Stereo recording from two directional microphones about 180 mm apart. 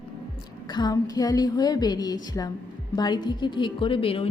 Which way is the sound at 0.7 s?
20° left (ahead or behind).